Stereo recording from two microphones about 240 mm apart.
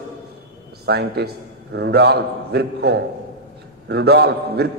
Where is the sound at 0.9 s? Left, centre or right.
Right.